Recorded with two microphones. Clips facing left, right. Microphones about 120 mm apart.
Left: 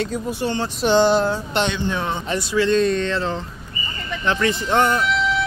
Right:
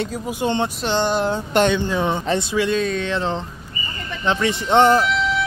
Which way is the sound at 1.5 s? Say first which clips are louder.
Right 6 dB; 45° right (ahead or behind).